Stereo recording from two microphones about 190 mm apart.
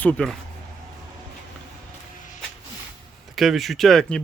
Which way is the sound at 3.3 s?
Centre (ahead or behind).